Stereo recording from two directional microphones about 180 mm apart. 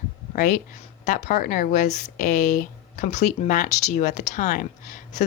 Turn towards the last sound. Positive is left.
turn(degrees=45)  # may be behind; listen again after turning